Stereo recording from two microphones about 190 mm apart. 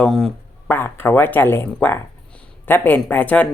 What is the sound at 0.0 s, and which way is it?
Speech, 5° left (ahead or behind).